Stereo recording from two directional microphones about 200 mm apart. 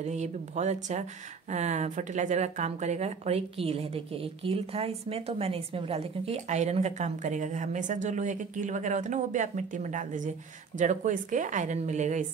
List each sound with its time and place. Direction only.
0.1 s speech: 35° right (ahead or behind)